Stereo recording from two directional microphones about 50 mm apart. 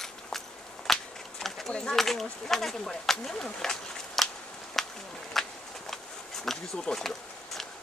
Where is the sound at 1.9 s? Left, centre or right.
Centre.